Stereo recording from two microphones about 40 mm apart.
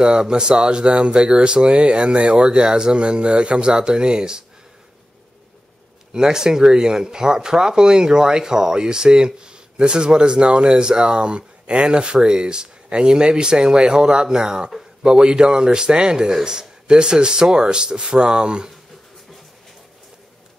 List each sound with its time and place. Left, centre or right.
0.0 s speech: right
6.1 s speech: centre